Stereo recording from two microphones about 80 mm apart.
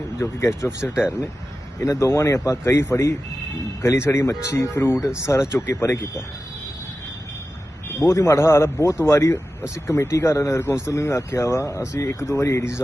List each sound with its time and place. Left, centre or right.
0.2 s speech: left
7.9 s speech: left